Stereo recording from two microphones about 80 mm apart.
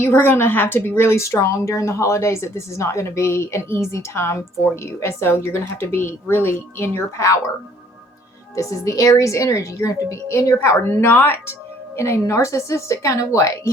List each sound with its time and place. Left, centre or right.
0.0 s a woman's voice: left
8.5 s a woman's voice: left